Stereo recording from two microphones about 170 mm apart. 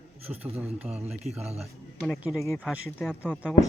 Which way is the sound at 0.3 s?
5° right (ahead or behind).